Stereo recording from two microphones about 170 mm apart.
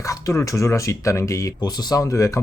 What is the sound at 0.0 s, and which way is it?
Speech, 20° left (ahead or behind).